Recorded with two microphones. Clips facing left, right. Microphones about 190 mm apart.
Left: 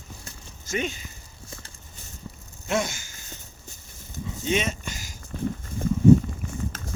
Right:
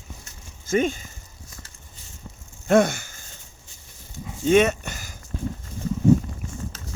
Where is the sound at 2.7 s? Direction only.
60° right (ahead or behind).